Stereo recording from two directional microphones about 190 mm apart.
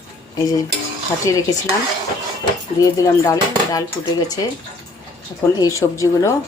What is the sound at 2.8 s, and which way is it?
Speech, 20° left (ahead or behind).